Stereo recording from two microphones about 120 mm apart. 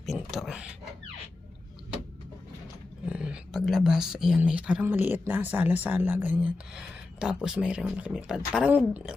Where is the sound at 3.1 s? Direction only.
10° right (ahead or behind).